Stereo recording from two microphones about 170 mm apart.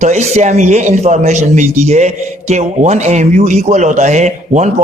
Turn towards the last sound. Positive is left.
turn(degrees=-45)  # may be behind; listen again after turning